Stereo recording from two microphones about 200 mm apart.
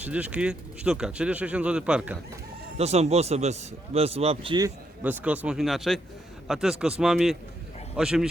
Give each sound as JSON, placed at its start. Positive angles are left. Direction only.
{"t": 0.0, "sound": "speech", "side_deg": -5}
{"t": 2.7, "sound": "a man's voice", "side_deg": -30}
{"t": 5.0, "sound": "speech", "side_deg": -5}